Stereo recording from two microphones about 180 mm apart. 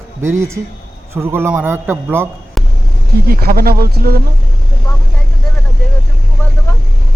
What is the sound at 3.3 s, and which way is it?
Speech, 55° right (ahead or behind).